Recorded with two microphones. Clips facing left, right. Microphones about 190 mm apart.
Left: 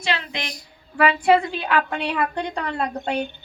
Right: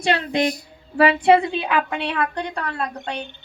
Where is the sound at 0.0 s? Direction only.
50° right (ahead or behind).